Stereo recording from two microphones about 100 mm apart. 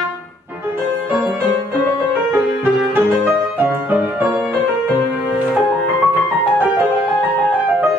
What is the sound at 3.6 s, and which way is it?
Music, 20° right (ahead or behind).